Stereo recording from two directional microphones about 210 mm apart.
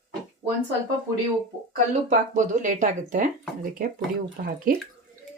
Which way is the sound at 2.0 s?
35° right (ahead or behind).